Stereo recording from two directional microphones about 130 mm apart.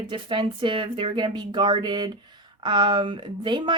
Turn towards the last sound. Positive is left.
turn(degrees=-35)  # may be behind; listen again after turning